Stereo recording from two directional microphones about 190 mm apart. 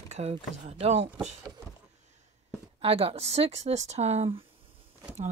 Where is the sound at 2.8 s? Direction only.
30° right (ahead or behind).